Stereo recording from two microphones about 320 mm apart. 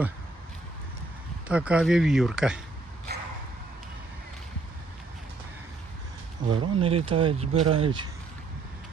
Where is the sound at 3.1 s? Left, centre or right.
Right.